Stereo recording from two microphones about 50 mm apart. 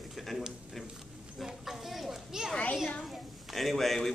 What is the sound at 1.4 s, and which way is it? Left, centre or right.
Children playing, centre.